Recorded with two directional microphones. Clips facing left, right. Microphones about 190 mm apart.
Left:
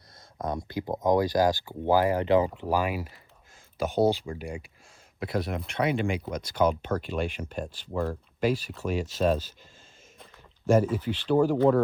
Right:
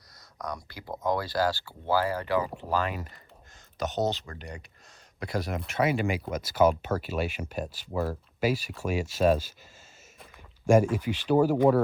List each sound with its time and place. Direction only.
0.3 s speech: 25° left (ahead or behind); by 9.5 s 10° right (ahead or behind)
10.9 s speech: 10° right (ahead or behind)